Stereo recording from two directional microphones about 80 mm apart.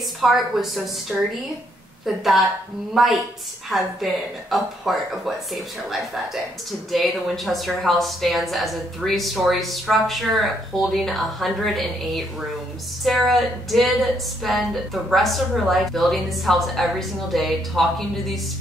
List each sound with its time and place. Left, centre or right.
0.2 s a woman's voice: centre